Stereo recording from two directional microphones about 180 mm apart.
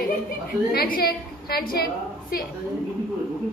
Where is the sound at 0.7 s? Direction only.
55° left (ahead or behind).